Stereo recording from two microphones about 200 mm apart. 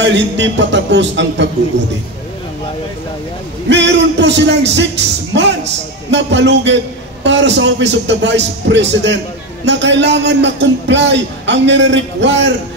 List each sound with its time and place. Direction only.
0.0 s a man's voice: 65° right (ahead or behind)
3.6 s a man's voice: 60° right (ahead or behind)